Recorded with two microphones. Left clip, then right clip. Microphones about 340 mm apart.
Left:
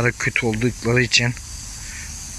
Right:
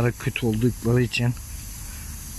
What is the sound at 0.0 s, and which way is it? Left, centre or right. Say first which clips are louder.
Speech: left 6 dB; centre.